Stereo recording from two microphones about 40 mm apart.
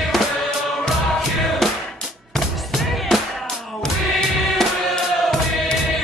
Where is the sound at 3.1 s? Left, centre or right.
Centre.